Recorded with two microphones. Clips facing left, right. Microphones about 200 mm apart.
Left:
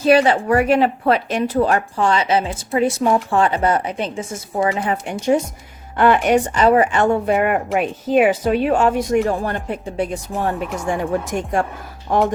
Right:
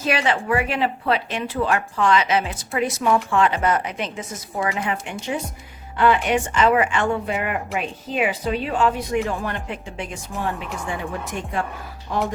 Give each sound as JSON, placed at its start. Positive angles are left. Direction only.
{"t": 0.0, "sound": "speech", "side_deg": 35}
{"t": 6.0, "sound": "a woman's voice", "side_deg": 45}